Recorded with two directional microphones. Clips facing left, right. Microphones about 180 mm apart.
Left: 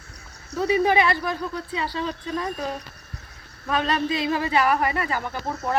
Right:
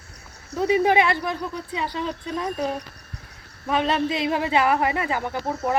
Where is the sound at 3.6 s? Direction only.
20° right (ahead or behind).